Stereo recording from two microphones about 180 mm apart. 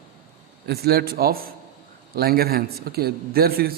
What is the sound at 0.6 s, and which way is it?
A man's voice, 60° right (ahead or behind).